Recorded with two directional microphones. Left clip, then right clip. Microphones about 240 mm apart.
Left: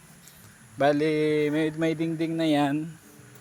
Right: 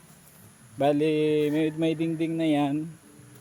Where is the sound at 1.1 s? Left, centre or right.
Centre.